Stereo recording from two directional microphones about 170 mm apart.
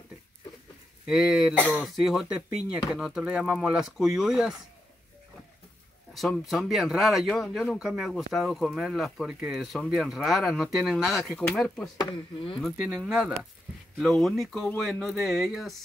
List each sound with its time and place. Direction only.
1.0 s speech: centre (ahead or behind)
6.1 s speech: centre (ahead or behind)
12.0 s speech: 25° left (ahead or behind)
12.6 s speech: centre (ahead or behind)